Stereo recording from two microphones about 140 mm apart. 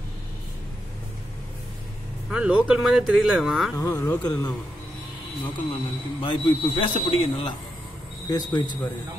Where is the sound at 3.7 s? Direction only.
25° left (ahead or behind).